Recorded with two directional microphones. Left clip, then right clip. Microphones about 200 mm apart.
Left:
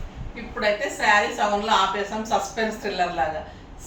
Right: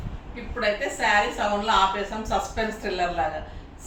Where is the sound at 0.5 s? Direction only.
Centre (ahead or behind).